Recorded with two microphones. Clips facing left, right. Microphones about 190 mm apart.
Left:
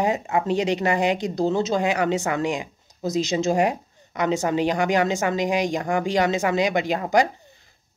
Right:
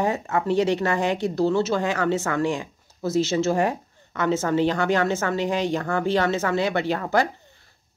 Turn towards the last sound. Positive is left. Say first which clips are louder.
# left 2 dB
turn(degrees=15)  # may be behind; listen again after turning